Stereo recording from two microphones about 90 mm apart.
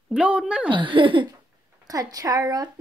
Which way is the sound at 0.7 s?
65° right (ahead or behind).